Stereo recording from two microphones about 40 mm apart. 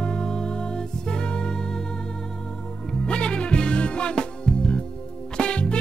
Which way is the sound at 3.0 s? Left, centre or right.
Left.